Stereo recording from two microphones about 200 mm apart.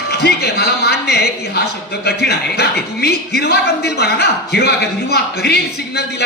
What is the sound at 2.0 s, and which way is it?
A man's voice, 55° left (ahead or behind).